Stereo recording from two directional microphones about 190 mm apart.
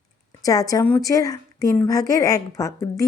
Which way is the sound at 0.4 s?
20° left (ahead or behind).